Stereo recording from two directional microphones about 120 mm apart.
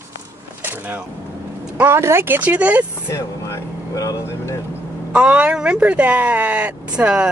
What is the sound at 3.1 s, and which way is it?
Speech, 20° left (ahead or behind).